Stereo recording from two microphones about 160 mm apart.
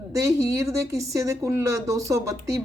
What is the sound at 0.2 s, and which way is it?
A woman's voice, 20° right (ahead or behind).